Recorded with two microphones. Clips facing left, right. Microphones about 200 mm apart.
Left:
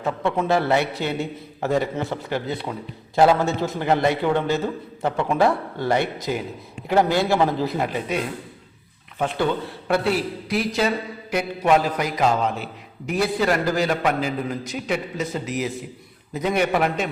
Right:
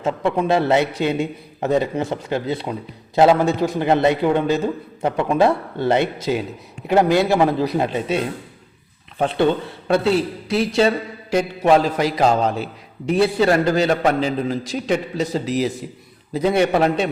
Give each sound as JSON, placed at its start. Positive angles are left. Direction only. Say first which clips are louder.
{"t": 0.0, "sound": "a man's voice", "louder": "right 3 dB", "side_deg": -20}